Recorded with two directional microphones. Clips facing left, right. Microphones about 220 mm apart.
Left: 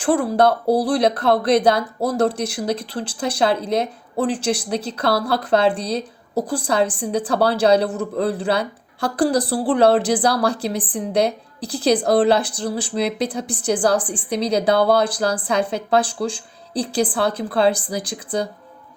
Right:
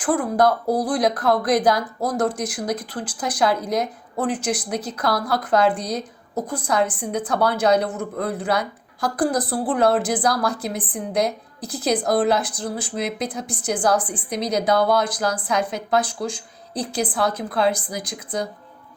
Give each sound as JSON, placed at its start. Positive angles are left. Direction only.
{"t": 0.0, "sound": "a woman's voice", "side_deg": 30}